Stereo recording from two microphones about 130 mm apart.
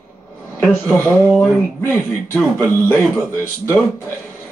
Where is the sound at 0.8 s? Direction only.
20° left (ahead or behind).